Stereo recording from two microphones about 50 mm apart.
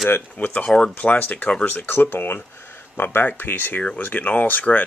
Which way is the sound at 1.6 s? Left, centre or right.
Left.